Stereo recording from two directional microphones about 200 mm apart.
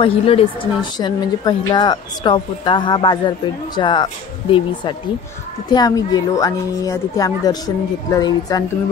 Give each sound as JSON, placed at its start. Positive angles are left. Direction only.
{"t": 0.0, "sound": "a woman's voice", "side_deg": 25}